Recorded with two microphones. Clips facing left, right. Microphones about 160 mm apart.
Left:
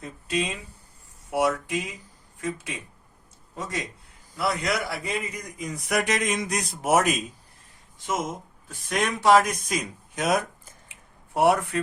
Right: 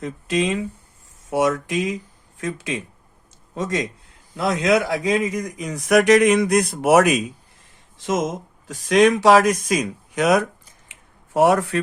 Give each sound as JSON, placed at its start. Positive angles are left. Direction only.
{"t": 0.0, "sound": "a man's voice", "side_deg": -90}
{"t": 8.0, "sound": "speech", "side_deg": -90}
{"t": 11.3, "sound": "speech", "side_deg": -90}